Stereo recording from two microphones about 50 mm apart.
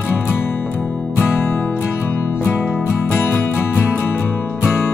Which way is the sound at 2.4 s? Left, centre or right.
Left.